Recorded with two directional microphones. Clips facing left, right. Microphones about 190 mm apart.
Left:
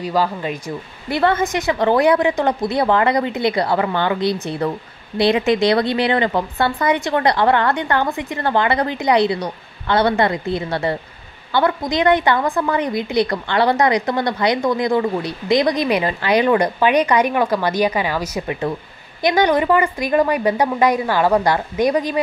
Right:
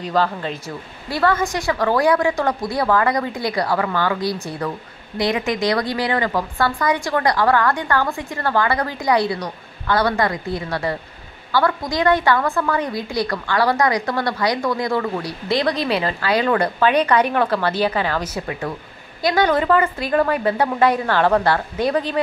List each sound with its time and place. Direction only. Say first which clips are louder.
0.0 s a woman's voice: left 1 dB; 10° left (ahead or behind)